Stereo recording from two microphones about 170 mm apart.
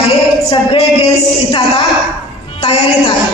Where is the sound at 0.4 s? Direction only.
35° left (ahead or behind).